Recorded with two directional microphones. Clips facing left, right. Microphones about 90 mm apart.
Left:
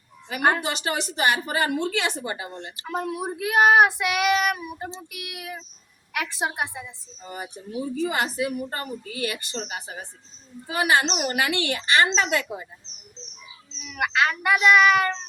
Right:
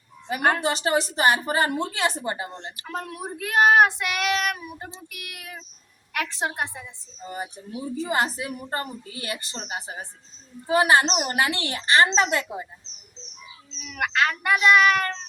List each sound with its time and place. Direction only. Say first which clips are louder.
0.6 s a woman's voice: right 4 dB; 35° right (ahead or behind)
2.9 s child singing: left 5 dB; 10° left (ahead or behind)
8.1 s a woman's voice: even; 30° right (ahead or behind)
13.7 s speech: left 1 dB; 5° left (ahead or behind)